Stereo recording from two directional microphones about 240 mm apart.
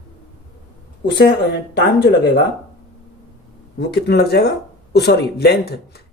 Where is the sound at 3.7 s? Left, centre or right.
Left.